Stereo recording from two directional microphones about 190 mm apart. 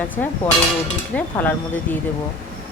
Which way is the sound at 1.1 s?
10° left (ahead or behind).